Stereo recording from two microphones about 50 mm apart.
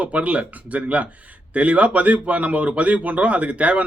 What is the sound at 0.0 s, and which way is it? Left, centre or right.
A man's voice, right.